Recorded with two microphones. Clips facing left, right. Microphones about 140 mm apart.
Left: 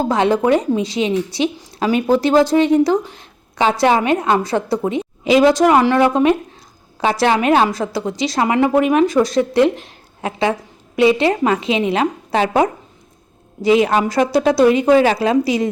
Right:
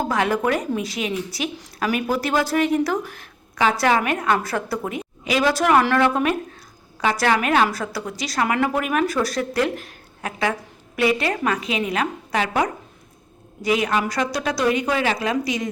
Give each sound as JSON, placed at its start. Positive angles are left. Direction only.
{"t": 0.0, "sound": "a woman's voice", "side_deg": 25}